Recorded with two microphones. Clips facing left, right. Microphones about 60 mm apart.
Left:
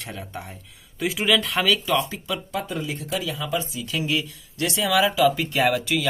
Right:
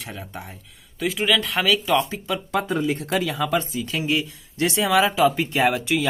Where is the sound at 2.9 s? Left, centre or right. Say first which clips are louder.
Right 5 dB; right.